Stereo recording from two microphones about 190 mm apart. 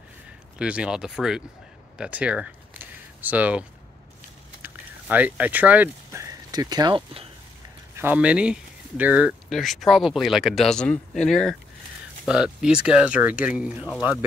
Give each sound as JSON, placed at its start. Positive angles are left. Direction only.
{"t": 0.6, "sound": "speech", "side_deg": -5}
{"t": 2.0, "sound": "a sound", "side_deg": -5}
{"t": 6.5, "sound": "speech", "side_deg": -20}
{"t": 7.9, "sound": "speech", "side_deg": -10}